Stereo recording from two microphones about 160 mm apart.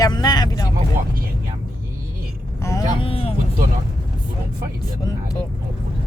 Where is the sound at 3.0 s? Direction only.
35° left (ahead or behind).